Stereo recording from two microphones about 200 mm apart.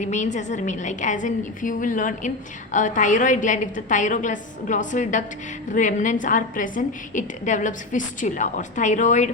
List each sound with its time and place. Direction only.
0.0 s a woman's voice: 35° left (ahead or behind)